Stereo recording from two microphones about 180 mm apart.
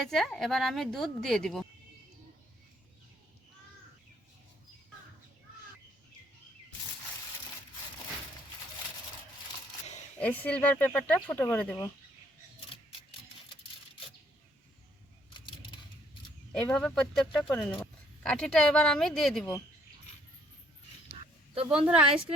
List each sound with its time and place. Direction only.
0.0 s a woman's voice: centre (ahead or behind)
10.2 s speech: 10° left (ahead or behind)
15.3 s a sound: 25° left (ahead or behind)
16.5 s a woman's voice: 5° left (ahead or behind)
21.1 s a sound: 30° right (ahead or behind)
21.7 s a woman's voice: 5° right (ahead or behind)